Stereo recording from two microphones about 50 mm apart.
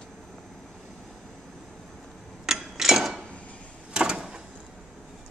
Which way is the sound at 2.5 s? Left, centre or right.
Centre.